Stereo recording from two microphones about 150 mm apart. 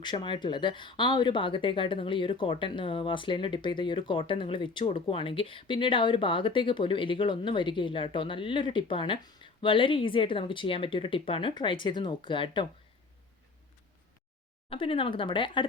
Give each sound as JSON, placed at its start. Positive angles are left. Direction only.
{"t": 0.0, "sound": "speech", "side_deg": 30}
{"t": 14.7, "sound": "speech", "side_deg": 35}